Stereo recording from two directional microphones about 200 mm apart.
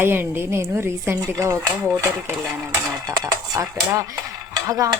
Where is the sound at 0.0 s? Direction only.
10° right (ahead or behind).